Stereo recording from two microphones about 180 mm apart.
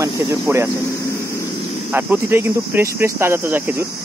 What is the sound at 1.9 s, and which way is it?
Speech, 10° right (ahead or behind).